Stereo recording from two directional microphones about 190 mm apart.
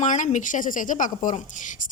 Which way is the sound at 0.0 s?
40° left (ahead or behind).